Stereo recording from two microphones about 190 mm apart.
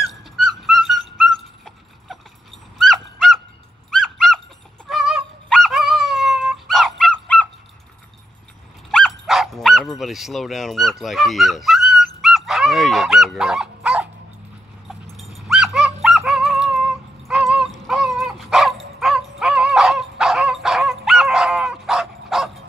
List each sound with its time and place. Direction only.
0.0 s dog: centre (ahead or behind)
8.9 s dog: centre (ahead or behind)